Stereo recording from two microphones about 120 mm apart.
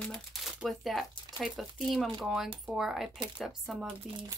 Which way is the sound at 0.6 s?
Centre (ahead or behind).